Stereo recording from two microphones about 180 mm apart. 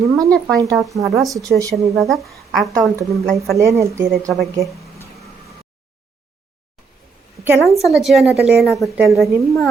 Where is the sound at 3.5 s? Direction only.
15° right (ahead or behind).